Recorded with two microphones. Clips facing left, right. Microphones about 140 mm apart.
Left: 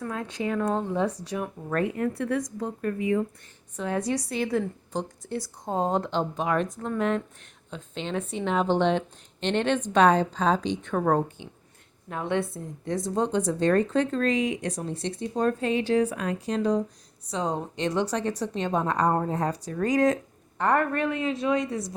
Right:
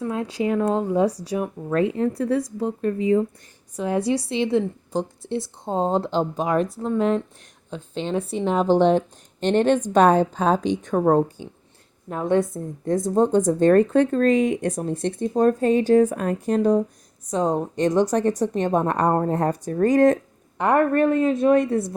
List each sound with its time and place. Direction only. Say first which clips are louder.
0.0 s speech: right 6 dB; 30° right (ahead or behind)
1.0 s a woman's voice: right 6 dB; 35° right (ahead or behind)
1.7 s speech: right 5 dB; 20° right (ahead or behind)
2.1 s a woman's voice: right 5 dB; 35° right (ahead or behind)
2.6 s a woman's voice: right 5 dB; 20° right (ahead or behind); by 10.9 s 50° right (ahead or behind)
10.9 s a woman's voice: right 6 dB; 30° right (ahead or behind); by 21.9 s 55° right (ahead or behind)